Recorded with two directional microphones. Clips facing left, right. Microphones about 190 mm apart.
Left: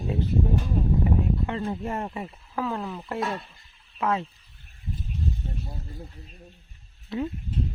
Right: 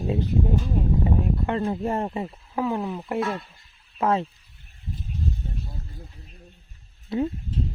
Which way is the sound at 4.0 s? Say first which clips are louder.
Right 4 dB; 35° right (ahead or behind).